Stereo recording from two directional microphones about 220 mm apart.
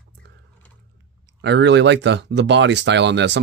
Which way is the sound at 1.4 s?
50° right (ahead or behind).